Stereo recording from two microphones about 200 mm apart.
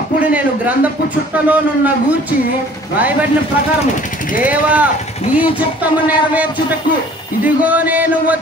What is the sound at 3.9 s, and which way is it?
Speech, 40° left (ahead or behind).